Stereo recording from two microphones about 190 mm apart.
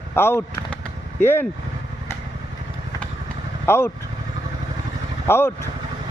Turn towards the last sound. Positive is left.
turn(degrees=10)  # may be behind; listen again after turning